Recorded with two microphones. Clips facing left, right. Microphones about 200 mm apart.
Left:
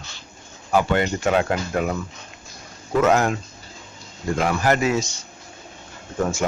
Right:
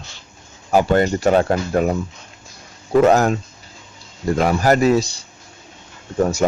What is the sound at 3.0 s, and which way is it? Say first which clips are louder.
Speech: right 3 dB; 35° right (ahead or behind).